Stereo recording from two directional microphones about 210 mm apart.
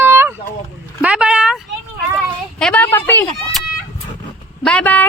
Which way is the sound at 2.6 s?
5° left (ahead or behind).